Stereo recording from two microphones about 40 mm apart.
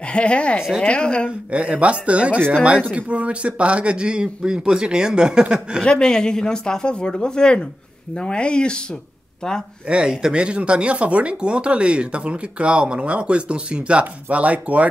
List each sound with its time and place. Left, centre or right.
0.1 s speech: left
0.6 s a woman's voice: centre
0.8 s speech: left
1.5 s speech: right
5.9 s speech: left
9.8 s speech: right